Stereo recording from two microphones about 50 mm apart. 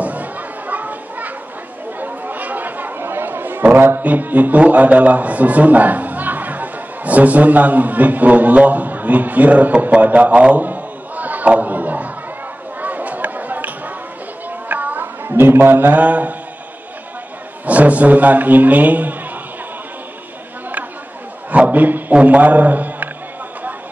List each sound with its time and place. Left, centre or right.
0.0 s children playing: right
2.0 s chatter: right
3.0 s speech: right
12.8 s chatter: right
14.7 s a sound: right
15.2 s a man's voice: right
16.0 s a man's voice: right
17.6 s a man's voice: right
21.5 s a sound: right
22.1 s a man's voice: right